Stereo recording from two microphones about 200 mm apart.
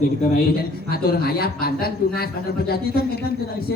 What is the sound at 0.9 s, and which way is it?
A woman's voice, 50° left (ahead or behind).